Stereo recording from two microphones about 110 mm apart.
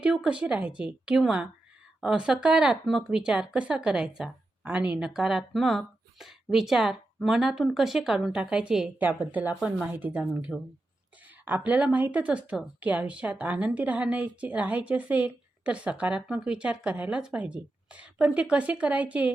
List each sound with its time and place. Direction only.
0.0 s speech: 10° right (ahead or behind)
9.6 s speech: 5° right (ahead or behind)
9.9 s speech: 15° right (ahead or behind)